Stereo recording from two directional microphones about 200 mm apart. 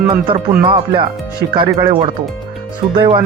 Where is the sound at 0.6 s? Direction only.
25° right (ahead or behind).